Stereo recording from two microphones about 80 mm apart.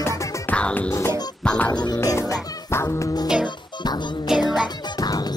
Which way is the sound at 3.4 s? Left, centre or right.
Left.